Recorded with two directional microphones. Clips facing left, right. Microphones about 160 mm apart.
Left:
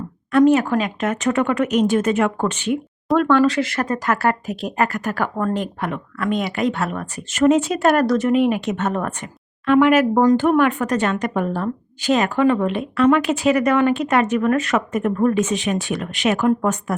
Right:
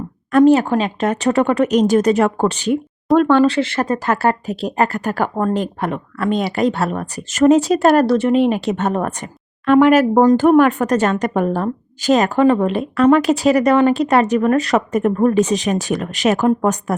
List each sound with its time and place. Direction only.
0.3 s speech: 35° right (ahead or behind)